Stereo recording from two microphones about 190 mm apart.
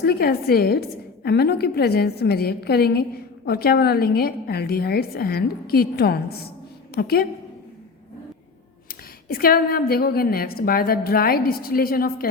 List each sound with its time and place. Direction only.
0.0 s a woman's voice: 55° left (ahead or behind)
8.9 s a woman's voice: 50° left (ahead or behind)